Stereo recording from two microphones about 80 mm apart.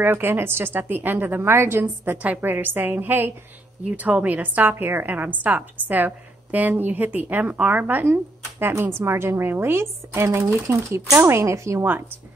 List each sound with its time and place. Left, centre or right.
0.0 s a woman's voice: right